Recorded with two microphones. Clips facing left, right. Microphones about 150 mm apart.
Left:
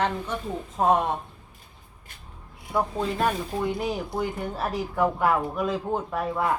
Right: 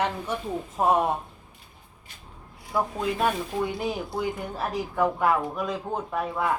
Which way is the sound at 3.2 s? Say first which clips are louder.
Even; centre (ahead or behind).